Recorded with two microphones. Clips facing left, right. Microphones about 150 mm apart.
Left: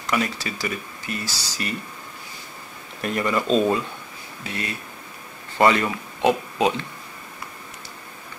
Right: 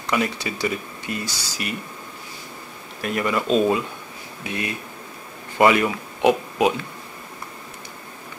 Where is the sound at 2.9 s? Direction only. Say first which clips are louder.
Even; 5° right (ahead or behind).